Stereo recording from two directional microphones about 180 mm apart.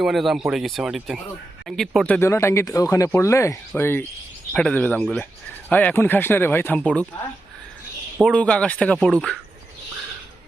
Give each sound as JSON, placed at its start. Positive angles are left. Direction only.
{"t": 0.0, "sound": "speech", "side_deg": 0}
{"t": 2.2, "sound": "speech", "side_deg": 15}
{"t": 8.2, "sound": "speech", "side_deg": 5}